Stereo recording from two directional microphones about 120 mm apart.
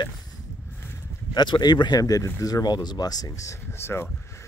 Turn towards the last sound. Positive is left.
turn(degrees=20)  # may be behind; listen again after turning